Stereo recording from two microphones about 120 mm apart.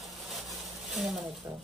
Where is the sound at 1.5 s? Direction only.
25° right (ahead or behind).